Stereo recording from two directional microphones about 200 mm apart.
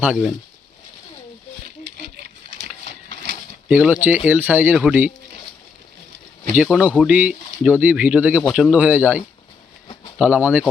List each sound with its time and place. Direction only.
0.0 s speech: 5° right (ahead or behind)
3.2 s bird: 60° right (ahead or behind)
3.7 s speech: 5° right (ahead or behind)
6.6 s speech: 5° right (ahead or behind)
10.2 s speech: 5° right (ahead or behind)